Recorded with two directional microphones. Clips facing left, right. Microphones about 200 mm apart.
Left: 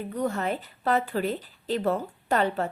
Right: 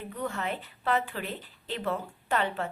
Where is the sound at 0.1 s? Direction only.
40° left (ahead or behind).